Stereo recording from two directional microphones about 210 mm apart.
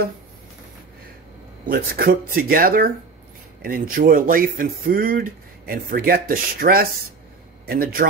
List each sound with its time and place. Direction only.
1.7 s speech: 45° right (ahead or behind)